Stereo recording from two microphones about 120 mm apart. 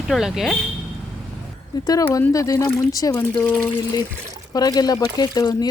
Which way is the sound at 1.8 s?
30° left (ahead or behind).